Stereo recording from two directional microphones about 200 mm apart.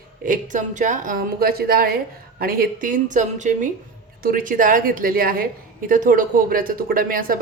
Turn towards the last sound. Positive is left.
turn(degrees=-45)  # may be behind; listen again after turning